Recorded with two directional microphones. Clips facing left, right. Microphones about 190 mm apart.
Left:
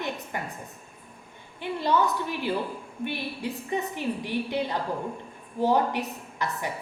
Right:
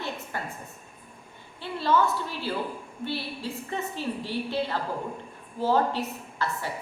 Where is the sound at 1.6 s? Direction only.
15° left (ahead or behind).